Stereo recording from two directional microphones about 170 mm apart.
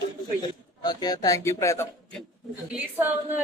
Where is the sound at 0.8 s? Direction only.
25° left (ahead or behind).